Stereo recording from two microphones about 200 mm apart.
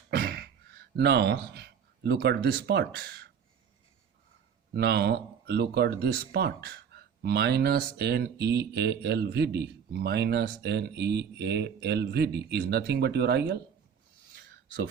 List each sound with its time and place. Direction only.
0.1 s a sound: 50° right (ahead or behind)
0.9 s speech: 55° right (ahead or behind)
4.7 s speech: 50° right (ahead or behind)